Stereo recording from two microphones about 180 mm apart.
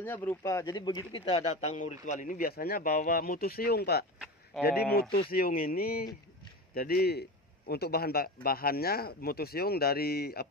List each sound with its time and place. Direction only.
0.0 s speech: 10° left (ahead or behind)
1.4 s a man's voice: 40° left (ahead or behind); by 10.5 s 60° left (ahead or behind)